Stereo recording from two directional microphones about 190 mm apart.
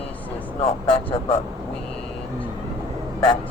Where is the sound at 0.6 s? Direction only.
30° left (ahead or behind).